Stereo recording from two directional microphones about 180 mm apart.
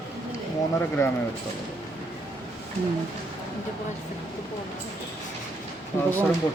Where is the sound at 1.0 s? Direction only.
15° left (ahead or behind).